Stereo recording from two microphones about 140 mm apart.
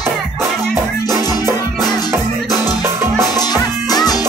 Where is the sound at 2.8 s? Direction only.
20° right (ahead or behind).